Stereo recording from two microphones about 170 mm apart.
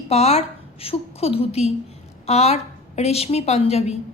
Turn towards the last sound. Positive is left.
turn(degrees=35)  # may be behind; listen again after turning